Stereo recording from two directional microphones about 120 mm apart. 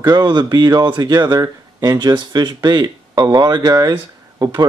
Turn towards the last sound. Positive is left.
turn(degrees=-35)  # may be behind; listen again after turning